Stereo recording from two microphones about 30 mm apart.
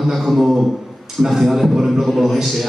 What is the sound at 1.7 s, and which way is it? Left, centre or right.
Speech, centre.